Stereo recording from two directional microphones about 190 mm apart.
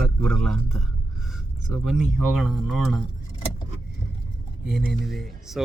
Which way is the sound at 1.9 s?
5° right (ahead or behind).